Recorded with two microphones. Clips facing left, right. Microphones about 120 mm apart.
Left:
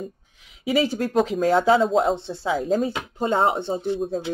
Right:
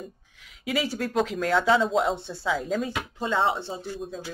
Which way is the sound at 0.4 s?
25° left (ahead or behind).